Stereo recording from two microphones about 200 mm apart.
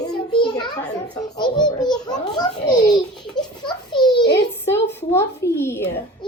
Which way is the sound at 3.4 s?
20° left (ahead or behind).